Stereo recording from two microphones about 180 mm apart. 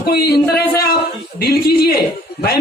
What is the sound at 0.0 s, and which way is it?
Speech, 60° left (ahead or behind).